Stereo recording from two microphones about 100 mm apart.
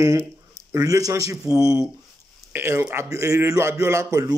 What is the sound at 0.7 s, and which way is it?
A man's voice, 35° right (ahead or behind).